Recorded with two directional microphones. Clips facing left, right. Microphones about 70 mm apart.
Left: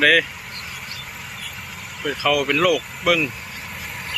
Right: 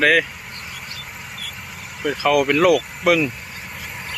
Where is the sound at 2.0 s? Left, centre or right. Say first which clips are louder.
Right 3 dB; centre.